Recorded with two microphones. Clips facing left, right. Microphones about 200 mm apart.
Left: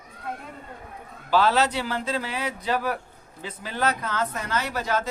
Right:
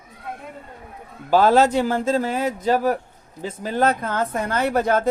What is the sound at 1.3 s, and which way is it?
Speech, 50° right (ahead or behind).